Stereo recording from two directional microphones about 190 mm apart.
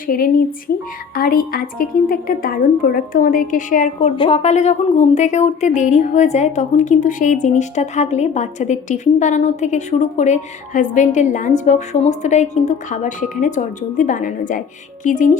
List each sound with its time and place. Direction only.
0.1 s a woman's voice: 50° left (ahead or behind)